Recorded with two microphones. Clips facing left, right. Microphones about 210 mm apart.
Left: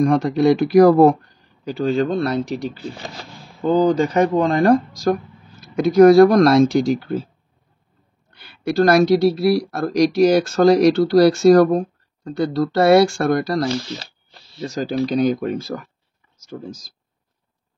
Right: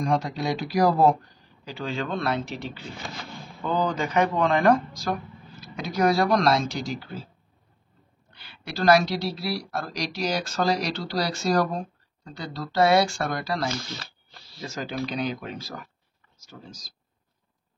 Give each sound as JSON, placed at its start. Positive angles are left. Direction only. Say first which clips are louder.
{"t": 0.0, "sound": "speech", "louder": "left 11 dB", "side_deg": 55}
{"t": 1.6, "sound": "speech", "louder": "left 12 dB", "side_deg": 45}
{"t": 8.3, "sound": "speech", "louder": "left 16 dB", "side_deg": 50}
{"t": 14.6, "sound": "speech", "louder": "left 9 dB", "side_deg": 35}